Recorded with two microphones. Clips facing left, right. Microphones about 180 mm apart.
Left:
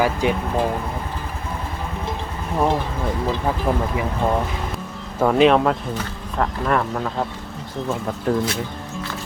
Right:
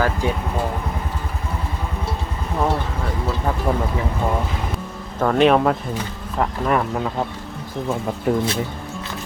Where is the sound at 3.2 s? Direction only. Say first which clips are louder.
Even; 10° left (ahead or behind).